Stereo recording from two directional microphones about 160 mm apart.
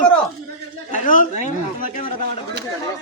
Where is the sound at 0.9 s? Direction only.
55° left (ahead or behind).